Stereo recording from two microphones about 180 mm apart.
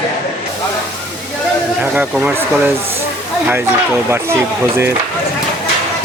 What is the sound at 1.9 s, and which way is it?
Speech, 10° right (ahead or behind).